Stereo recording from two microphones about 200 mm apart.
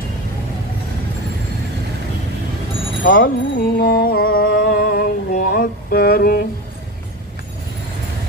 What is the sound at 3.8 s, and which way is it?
Music, 50° left (ahead or behind).